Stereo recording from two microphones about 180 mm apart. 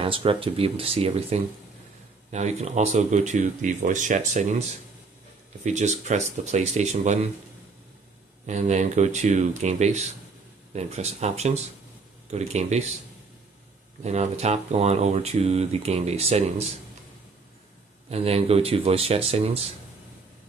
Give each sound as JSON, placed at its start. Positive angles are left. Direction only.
{"t": 0.0, "sound": "speech", "side_deg": -30}
{"t": 8.5, "sound": "speech", "side_deg": -40}
{"t": 14.0, "sound": "speech", "side_deg": -35}
{"t": 18.1, "sound": "speech", "side_deg": -35}